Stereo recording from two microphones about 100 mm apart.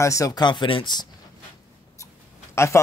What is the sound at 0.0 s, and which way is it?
Speech, 35° left (ahead or behind).